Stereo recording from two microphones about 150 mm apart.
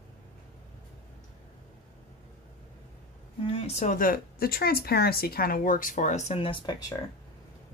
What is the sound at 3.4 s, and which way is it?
Speech, 45° left (ahead or behind).